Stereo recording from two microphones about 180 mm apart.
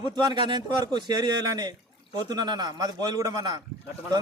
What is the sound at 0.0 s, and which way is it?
A man's voice, 25° right (ahead or behind).